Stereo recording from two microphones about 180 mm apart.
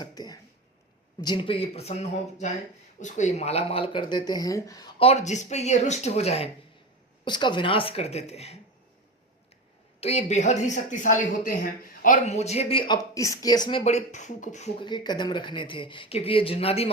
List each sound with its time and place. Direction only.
0.0 s a sound: 20° left (ahead or behind)
1.2 s a woman's voice: 25° left (ahead or behind)
4.9 s a woman's voice: 35° left (ahead or behind)
7.3 s a woman's voice: 25° left (ahead or behind)
10.0 s a woman's voice: 35° left (ahead or behind)
14.8 s speech: 25° left (ahead or behind)